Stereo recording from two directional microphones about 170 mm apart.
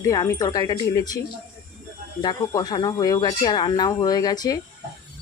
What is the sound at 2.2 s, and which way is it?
Speech, 25° left (ahead or behind).